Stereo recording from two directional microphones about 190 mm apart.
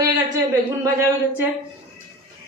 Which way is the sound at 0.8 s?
15° right (ahead or behind).